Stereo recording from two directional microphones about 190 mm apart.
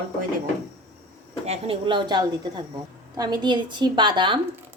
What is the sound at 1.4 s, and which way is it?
A woman's voice, 30° right (ahead or behind).